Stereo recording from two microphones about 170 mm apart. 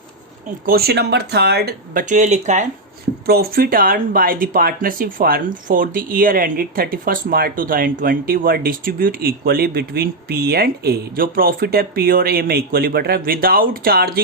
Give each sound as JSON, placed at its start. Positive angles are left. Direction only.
{"t": 0.6, "sound": "speech", "side_deg": -65}
{"t": 3.2, "sound": "speech", "side_deg": -65}